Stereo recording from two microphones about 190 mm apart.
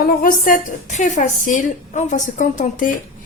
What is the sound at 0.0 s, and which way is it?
A woman's voice, 45° left (ahead or behind).